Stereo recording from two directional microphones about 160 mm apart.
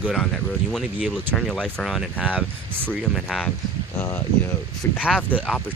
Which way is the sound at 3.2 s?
Centre (ahead or behind).